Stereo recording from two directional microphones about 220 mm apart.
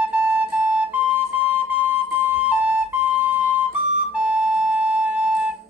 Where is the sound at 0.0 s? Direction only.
5° right (ahead or behind).